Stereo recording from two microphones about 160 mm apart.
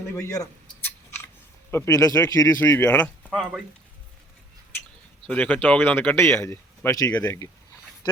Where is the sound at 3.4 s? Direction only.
Centre (ahead or behind).